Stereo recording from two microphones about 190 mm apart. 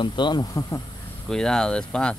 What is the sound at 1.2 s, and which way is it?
Speech, 5° left (ahead or behind).